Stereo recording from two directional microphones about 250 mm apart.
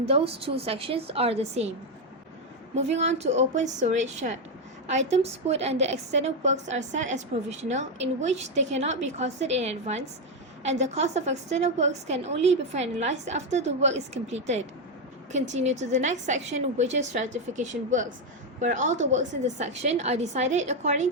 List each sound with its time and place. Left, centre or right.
0.0 s a woman's voice: right
2.7 s a woman's voice: right